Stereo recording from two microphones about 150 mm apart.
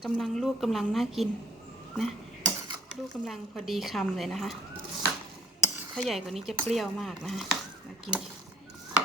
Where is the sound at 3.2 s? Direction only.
Centre (ahead or behind).